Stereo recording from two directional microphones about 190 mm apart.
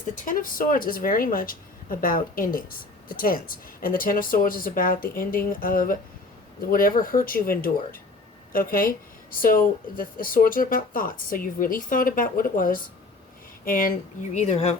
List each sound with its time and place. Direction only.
0.3 s speech: 45° left (ahead or behind)
14.3 s speech: 35° left (ahead or behind)